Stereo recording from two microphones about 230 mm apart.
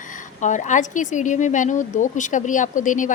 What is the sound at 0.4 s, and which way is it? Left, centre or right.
A woman's voice, left.